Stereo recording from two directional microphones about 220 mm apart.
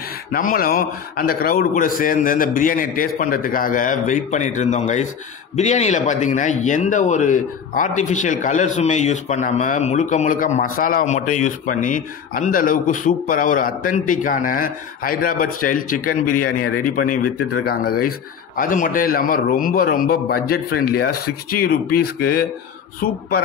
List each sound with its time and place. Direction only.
0.3 s a man's voice: 40° left (ahead or behind)
16.3 s speech: 90° left
16.8 s a man's voice: 40° left (ahead or behind)